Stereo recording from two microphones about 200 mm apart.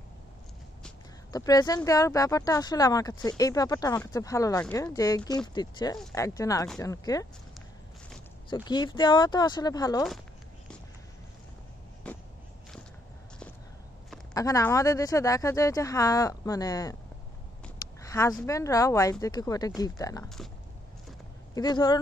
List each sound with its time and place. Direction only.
1.3 s speech: 20° left (ahead or behind)
8.6 s speech: 20° left (ahead or behind)
12.1 s skateboard: 5° left (ahead or behind)
14.3 s speech: 15° left (ahead or behind)
18.0 s speech: 15° left (ahead or behind)
21.5 s speech: 20° left (ahead or behind)